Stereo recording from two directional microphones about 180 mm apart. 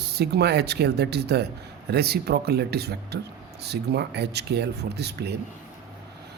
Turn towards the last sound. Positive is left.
turn(degrees=-65)  # may be behind; listen again after turning